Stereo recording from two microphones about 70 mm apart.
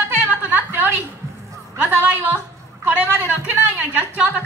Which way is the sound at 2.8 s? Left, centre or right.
Right.